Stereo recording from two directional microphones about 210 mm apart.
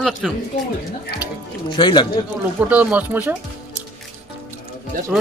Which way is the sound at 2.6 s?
5° right (ahead or behind).